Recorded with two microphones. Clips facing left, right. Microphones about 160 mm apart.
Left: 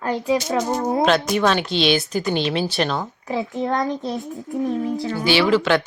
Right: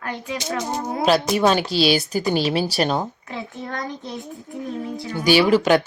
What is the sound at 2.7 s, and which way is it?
Speech, 40° right (ahead or behind).